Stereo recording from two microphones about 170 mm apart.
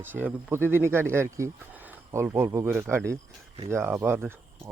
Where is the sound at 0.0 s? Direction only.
10° right (ahead or behind).